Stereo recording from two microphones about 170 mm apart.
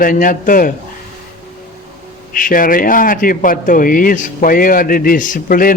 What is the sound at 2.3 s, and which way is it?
Speech, 55° left (ahead or behind).